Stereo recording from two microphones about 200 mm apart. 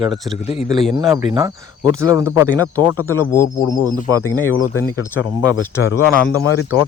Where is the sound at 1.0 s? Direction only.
15° right (ahead or behind).